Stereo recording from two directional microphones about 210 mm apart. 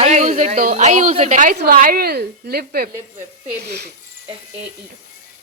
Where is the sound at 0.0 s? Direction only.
35° right (ahead or behind).